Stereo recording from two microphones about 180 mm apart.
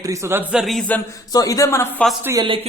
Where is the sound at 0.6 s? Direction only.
Centre (ahead or behind).